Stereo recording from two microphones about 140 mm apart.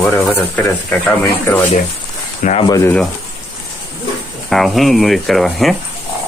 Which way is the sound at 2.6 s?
25° left (ahead or behind).